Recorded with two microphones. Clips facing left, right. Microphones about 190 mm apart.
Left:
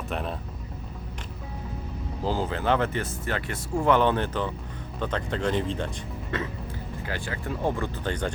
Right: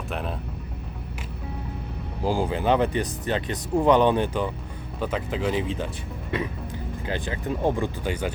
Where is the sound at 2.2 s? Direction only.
15° right (ahead or behind).